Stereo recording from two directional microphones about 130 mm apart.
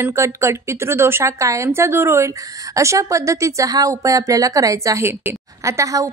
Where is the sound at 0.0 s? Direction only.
20° right (ahead or behind).